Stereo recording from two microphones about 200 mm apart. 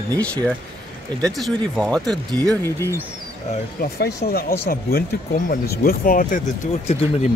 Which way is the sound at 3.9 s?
55° left (ahead or behind).